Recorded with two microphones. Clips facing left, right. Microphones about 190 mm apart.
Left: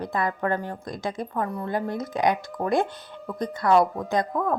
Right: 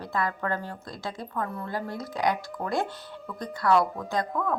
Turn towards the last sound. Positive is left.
turn(degrees=20)  # may be behind; listen again after turning